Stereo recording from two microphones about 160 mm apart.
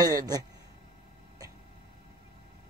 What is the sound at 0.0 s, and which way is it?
Speech, 20° right (ahead or behind).